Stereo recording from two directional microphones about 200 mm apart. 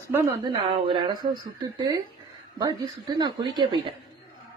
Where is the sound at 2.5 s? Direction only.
20° right (ahead or behind).